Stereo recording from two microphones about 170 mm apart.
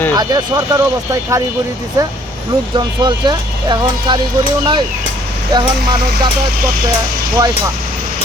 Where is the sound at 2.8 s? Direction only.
25° right (ahead or behind).